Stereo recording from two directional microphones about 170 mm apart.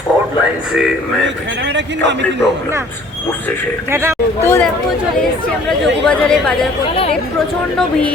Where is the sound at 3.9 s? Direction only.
15° right (ahead or behind).